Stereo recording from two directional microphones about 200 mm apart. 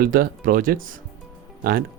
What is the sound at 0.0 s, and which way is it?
Speech, 45° right (ahead or behind).